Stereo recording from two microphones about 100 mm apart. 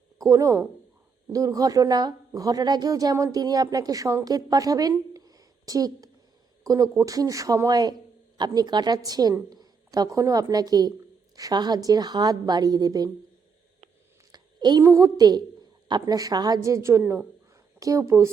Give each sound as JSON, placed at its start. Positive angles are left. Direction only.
{"t": 0.2, "sound": "a woman's voice", "side_deg": -35}
{"t": 14.3, "sound": "a woman's voice", "side_deg": -45}